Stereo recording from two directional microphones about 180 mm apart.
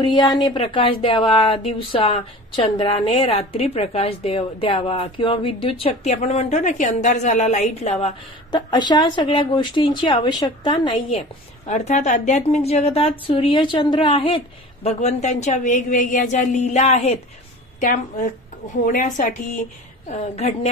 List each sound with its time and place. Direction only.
0.0 s speech: 25° left (ahead or behind)
8.5 s speech: 25° left (ahead or behind)
11.6 s speech: 40° left (ahead or behind)
17.7 s a woman's voice: 45° left (ahead or behind)